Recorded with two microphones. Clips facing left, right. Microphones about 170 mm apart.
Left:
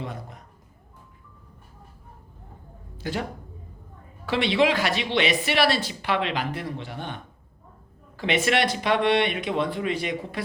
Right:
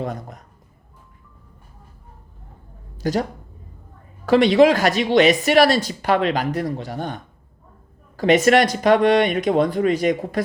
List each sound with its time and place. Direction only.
0.0 s speech: 40° right (ahead or behind)
3.0 s speech: 40° right (ahead or behind)
4.3 s a woman's voice: 40° right (ahead or behind)